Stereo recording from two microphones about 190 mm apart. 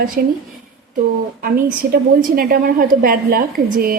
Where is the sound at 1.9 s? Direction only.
50° right (ahead or behind).